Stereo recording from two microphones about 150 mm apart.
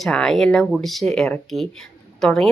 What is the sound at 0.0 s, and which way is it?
A woman's voice, 5° left (ahead or behind).